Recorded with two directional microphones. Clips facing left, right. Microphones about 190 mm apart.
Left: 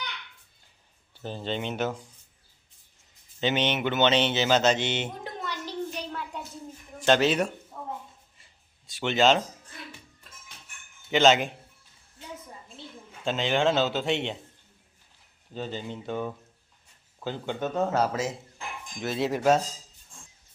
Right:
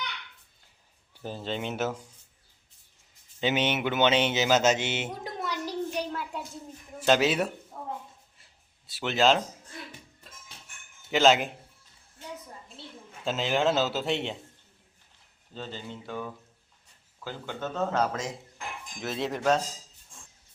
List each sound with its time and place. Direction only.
1.1 s speech: 5° right (ahead or behind)
3.4 s speech: 10° right (ahead or behind)
5.4 s a sound: 10° right (ahead or behind)
8.9 s speech: 5° right (ahead or behind)
11.1 s speech: centre (ahead or behind)
13.2 s speech: 5° right (ahead or behind)
15.5 s speech: 15° left (ahead or behind)